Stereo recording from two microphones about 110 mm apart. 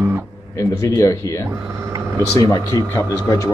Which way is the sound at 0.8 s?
30° left (ahead or behind).